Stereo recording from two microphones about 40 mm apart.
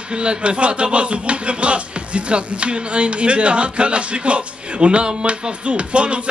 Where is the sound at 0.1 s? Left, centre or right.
Right.